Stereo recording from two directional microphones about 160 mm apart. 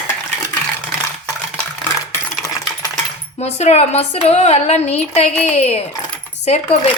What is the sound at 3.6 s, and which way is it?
A woman's voice, 45° left (ahead or behind).